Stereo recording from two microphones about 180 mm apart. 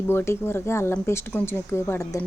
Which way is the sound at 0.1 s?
15° left (ahead or behind).